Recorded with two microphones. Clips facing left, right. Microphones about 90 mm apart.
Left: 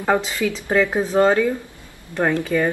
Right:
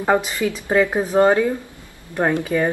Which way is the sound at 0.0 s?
20° right (ahead or behind).